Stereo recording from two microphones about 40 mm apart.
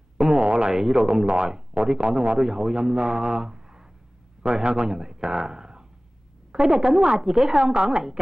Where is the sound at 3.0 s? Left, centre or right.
Right.